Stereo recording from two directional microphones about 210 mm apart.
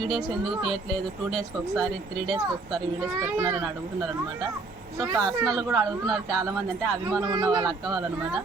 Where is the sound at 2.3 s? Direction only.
20° right (ahead or behind).